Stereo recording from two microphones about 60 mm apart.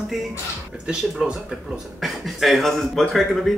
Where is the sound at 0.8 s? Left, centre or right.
Centre.